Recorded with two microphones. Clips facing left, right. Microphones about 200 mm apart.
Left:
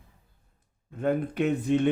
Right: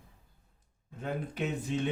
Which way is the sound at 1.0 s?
60° left (ahead or behind).